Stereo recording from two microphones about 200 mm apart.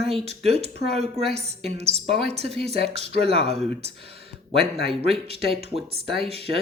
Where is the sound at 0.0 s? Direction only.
30° right (ahead or behind).